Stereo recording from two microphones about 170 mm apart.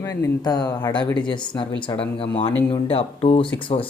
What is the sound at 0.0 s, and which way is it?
Speech, 20° left (ahead or behind).